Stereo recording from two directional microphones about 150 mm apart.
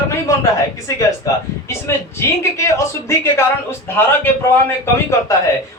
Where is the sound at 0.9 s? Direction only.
20° left (ahead or behind).